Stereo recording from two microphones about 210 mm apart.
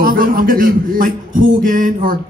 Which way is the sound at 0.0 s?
45° right (ahead or behind).